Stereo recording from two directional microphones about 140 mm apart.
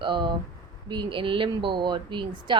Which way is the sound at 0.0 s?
35° right (ahead or behind).